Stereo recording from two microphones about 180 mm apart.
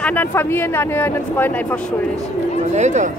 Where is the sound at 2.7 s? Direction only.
40° right (ahead or behind).